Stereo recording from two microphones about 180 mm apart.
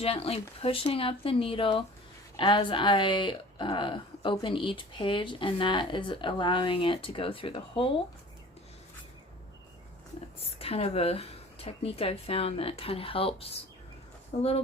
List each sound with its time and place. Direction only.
0.0 s speech: 35° left (ahead or behind)
10.6 s speech: 35° left (ahead or behind)